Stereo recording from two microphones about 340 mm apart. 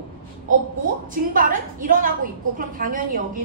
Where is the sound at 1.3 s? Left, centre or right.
Right.